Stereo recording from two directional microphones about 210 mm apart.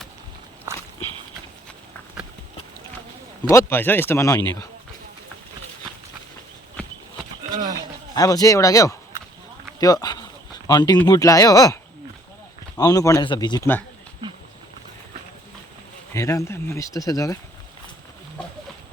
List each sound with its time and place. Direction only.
0.7 s walk: 15° right (ahead or behind)
3.5 s speech: 10° left (ahead or behind)
8.1 s speech: 15° left (ahead or behind)
16.1 s speech: 15° left (ahead or behind)